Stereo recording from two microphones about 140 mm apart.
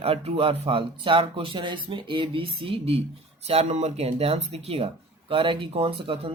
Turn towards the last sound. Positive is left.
turn(degrees=-40)  # may be behind; listen again after turning